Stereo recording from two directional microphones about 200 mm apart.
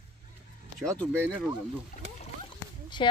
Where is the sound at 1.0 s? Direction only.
5° left (ahead or behind).